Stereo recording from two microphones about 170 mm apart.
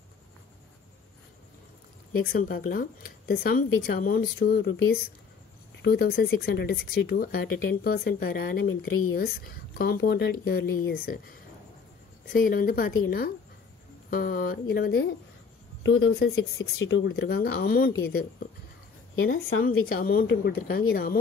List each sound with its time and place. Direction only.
2.2 s speech: 60° left (ahead or behind)
5.8 s speech: 65° left (ahead or behind)
19.6 s speech: 60° left (ahead or behind)